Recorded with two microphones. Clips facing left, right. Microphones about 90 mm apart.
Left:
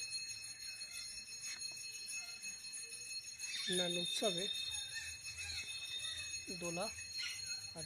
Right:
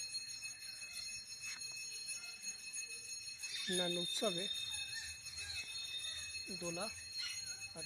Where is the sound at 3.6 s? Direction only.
15° right (ahead or behind).